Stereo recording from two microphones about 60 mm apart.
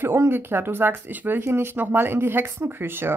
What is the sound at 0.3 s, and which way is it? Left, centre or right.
Speech, right.